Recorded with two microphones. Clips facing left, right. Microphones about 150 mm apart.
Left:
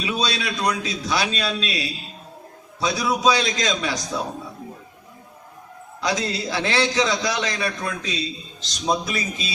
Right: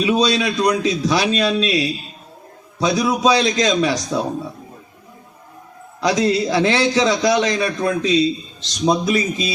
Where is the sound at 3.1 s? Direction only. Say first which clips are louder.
Right 2 dB; 25° right (ahead or behind).